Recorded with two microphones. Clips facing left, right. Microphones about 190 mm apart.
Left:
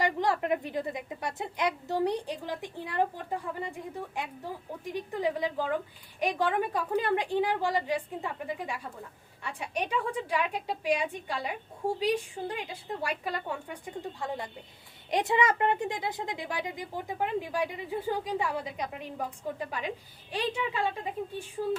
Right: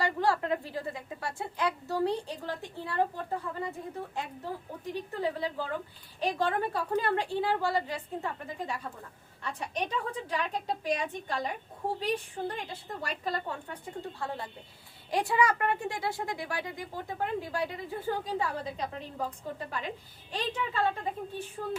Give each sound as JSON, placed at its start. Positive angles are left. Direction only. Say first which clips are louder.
{"t": 0.0, "sound": "a woman's voice", "louder": "left 1 dB", "side_deg": 15}